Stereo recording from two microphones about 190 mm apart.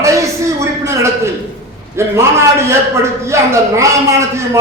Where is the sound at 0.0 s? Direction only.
15° right (ahead or behind).